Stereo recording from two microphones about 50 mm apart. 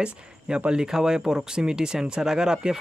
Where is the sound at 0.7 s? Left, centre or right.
Centre.